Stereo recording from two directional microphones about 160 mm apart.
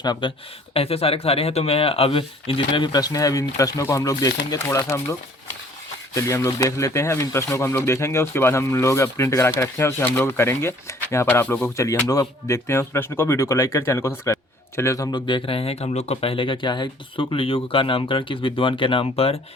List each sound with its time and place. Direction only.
0.0 s speech: 30° left (ahead or behind)
6.1 s speech: 20° left (ahead or behind); by 19.4 s 40° left (ahead or behind)